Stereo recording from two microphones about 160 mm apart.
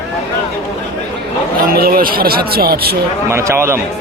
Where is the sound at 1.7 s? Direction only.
65° right (ahead or behind).